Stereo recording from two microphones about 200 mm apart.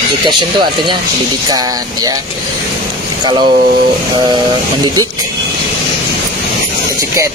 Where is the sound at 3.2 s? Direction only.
25° right (ahead or behind).